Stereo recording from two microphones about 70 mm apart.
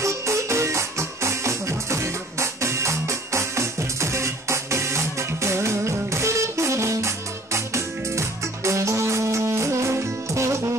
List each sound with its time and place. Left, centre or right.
0.0 s music: right